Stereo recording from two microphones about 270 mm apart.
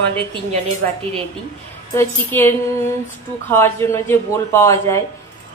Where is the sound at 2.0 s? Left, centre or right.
Centre.